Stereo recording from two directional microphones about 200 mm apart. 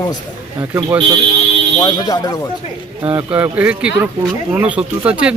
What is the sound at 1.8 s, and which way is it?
Speech, 20° left (ahead or behind).